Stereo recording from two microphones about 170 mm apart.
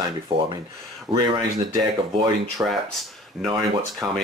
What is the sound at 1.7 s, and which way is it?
Speech, 20° right (ahead or behind).